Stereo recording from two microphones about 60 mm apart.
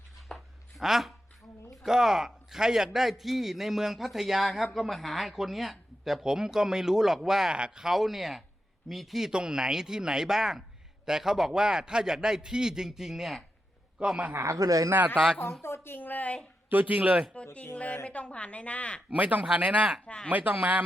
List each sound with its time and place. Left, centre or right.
0.3 s a sound: centre
0.8 s a man's voice: centre
14.4 s speech: right
15.6 s a sound: left
16.6 s speech: right
16.9 s speech: right
17.3 s a woman's voice: left
19.1 s speech: right
20.1 s speech: centre
20.3 s speech: right